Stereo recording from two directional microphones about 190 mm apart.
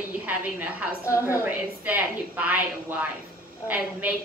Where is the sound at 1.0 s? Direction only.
15° left (ahead or behind).